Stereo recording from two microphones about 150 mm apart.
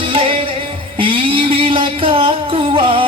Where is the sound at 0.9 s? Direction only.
35° right (ahead or behind).